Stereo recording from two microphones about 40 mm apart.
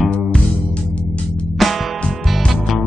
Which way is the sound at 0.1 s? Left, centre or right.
Left.